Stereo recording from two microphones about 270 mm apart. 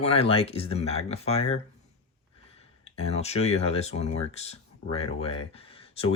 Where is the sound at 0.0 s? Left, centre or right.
Left.